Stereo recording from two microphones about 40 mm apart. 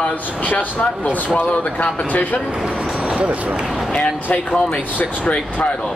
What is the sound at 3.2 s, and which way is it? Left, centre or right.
Speech, right.